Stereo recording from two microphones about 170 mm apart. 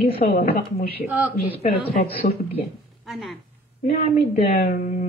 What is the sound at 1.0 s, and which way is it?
Speech, 10° right (ahead or behind).